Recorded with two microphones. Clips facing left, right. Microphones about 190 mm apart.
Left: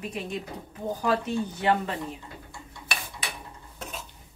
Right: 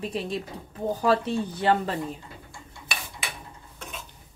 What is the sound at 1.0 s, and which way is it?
Speech, 30° right (ahead or behind).